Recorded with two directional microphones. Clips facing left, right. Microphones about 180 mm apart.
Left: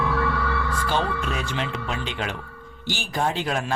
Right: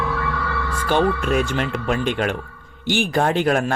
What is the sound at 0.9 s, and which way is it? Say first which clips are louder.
Speech: right 9 dB; 55° right (ahead or behind).